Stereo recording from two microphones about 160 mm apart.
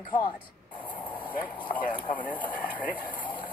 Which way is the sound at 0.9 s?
10° left (ahead or behind).